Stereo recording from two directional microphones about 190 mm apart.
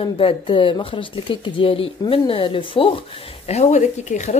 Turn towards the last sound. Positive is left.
turn(degrees=40)  # may be behind; listen again after turning